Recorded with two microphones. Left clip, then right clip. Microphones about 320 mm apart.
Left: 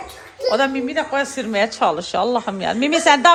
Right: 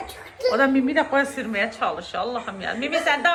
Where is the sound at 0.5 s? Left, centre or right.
Centre.